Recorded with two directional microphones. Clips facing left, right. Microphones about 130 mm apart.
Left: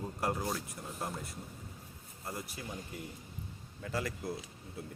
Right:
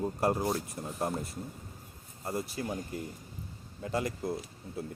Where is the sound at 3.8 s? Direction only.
25° right (ahead or behind).